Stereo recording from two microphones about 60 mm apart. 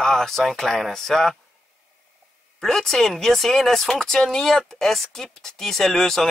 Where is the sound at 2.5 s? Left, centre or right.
Centre.